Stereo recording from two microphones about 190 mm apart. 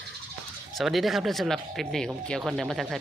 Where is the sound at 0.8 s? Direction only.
Centre (ahead or behind).